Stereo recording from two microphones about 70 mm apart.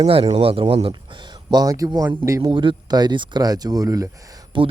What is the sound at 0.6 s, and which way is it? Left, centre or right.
Speech, right.